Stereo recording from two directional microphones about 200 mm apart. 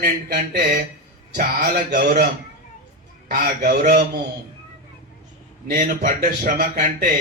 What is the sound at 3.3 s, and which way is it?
Speech, 45° right (ahead or behind).